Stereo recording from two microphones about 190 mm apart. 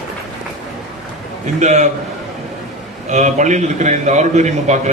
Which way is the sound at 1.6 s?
35° right (ahead or behind).